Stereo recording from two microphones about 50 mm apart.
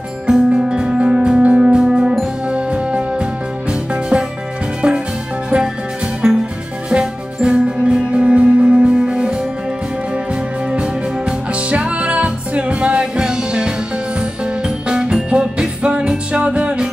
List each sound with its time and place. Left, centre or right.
0.3 s music: centre
6.9 s music: centre
10.7 s music: right